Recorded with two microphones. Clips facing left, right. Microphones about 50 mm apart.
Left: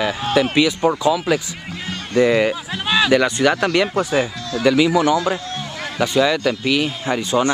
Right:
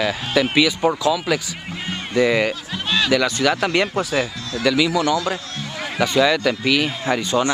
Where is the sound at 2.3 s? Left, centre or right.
Centre.